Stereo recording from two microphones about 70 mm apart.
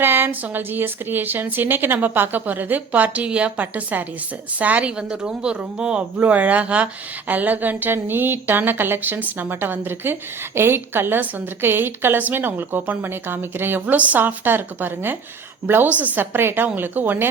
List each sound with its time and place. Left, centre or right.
0.0 s speech: right
13.8 s speech: right